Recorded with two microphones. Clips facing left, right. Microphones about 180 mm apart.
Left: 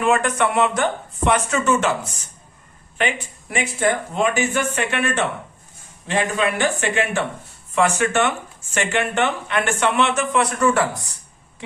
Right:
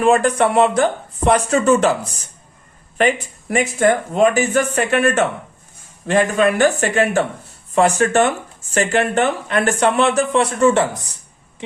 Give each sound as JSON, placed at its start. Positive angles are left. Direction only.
{"t": 0.0, "sound": "speech", "side_deg": -35}
{"t": 3.0, "sound": "speech", "side_deg": -40}